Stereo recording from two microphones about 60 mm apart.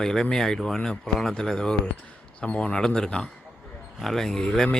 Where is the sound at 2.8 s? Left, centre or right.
Centre.